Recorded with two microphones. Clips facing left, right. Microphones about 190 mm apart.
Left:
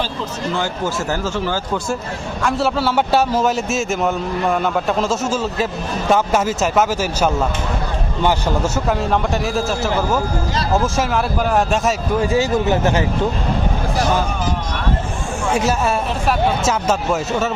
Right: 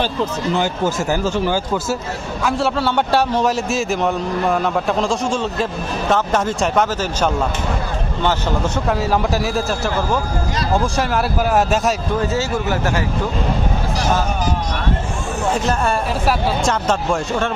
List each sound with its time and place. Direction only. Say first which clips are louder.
0.5 s speech: right 1 dB; 15° right (ahead or behind)
2.4 s a man's voice: even; centre (ahead or behind)
12.3 s speech: left 4 dB; 15° left (ahead or behind)
15.5 s a man's voice: left 3 dB; 5° left (ahead or behind)